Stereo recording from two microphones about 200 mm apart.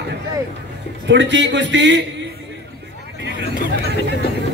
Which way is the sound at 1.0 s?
65° right (ahead or behind).